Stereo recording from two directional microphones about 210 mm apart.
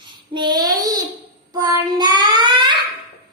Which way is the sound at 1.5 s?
20° right (ahead or behind).